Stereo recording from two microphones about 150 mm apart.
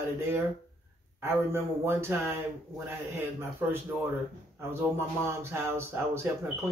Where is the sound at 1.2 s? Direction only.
15° right (ahead or behind).